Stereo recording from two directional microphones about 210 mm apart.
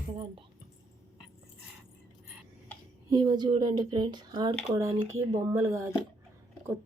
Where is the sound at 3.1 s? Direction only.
20° right (ahead or behind).